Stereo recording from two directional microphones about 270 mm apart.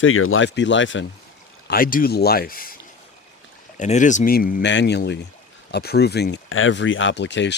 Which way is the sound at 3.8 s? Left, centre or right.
Left.